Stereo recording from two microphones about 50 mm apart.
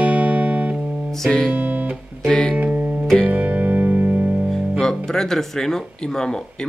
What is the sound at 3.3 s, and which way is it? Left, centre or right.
Music, right.